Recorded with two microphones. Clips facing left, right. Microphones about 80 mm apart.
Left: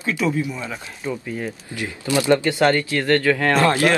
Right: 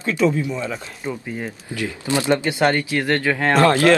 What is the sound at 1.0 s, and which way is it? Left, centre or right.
Speech, centre.